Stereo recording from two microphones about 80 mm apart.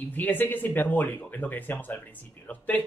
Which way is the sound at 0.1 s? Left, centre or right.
Left.